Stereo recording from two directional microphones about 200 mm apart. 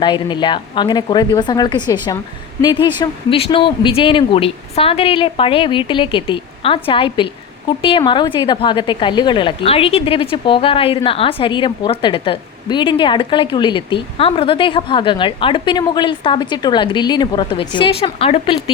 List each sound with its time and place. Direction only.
0.0 s a woman's voice: 25° left (ahead or behind)